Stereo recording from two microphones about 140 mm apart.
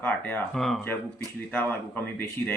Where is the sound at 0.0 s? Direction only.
10° left (ahead or behind).